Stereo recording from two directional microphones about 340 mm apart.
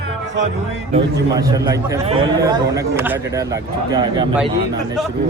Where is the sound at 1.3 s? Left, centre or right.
Centre.